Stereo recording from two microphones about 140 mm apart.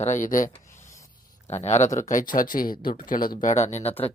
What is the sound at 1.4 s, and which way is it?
Speech, 50° left (ahead or behind).